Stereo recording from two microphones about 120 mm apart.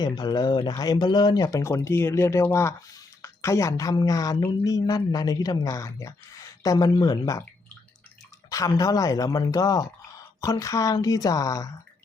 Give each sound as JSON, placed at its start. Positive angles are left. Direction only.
{"t": 0.0, "sound": "speech", "side_deg": 35}
{"t": 8.4, "sound": "speech", "side_deg": 30}